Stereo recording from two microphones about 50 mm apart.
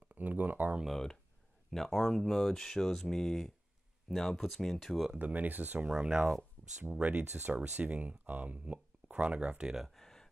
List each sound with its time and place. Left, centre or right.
0.1 s speech: right
0.8 s speech: centre
5.2 s speech: right
5.9 s speech: centre
7.0 s speech: right
7.2 s speech: right; by 9.8 s centre
9.8 s a sound: centre